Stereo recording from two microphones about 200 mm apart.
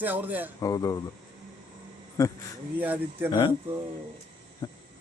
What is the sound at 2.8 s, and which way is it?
Speech, 10° right (ahead or behind).